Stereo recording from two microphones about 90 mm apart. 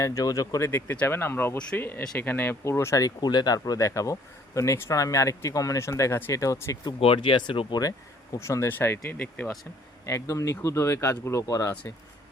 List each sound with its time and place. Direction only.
0.0 s speech: 40° left (ahead or behind)
0.7 s speech: 25° left (ahead or behind)
7.0 s speech: 85° left; by 7.8 s 70° left (ahead or behind)
8.4 s speech: 35° left (ahead or behind)
10.1 s speech: 35° left (ahead or behind)